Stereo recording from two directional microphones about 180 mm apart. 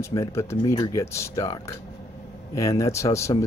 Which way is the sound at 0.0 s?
15° left (ahead or behind).